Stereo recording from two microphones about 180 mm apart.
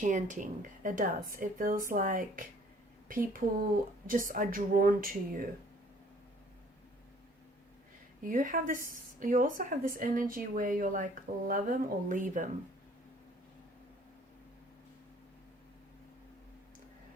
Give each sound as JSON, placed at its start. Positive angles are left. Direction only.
{"t": 0.0, "sound": "speech", "side_deg": -45}
{"t": 8.2, "sound": "speech", "side_deg": -45}